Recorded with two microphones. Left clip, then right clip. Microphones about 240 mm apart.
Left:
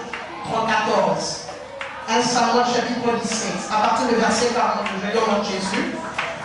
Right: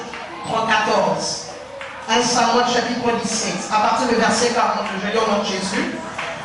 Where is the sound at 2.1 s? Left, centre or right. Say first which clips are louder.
Right 2 dB; centre.